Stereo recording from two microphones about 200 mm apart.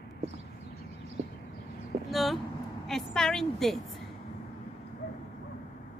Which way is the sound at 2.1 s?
Centre (ahead or behind).